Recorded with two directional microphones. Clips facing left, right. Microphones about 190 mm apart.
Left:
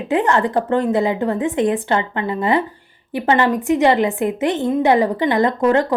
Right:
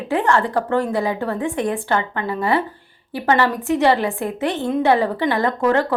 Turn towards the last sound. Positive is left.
turn(degrees=15)  # may be behind; listen again after turning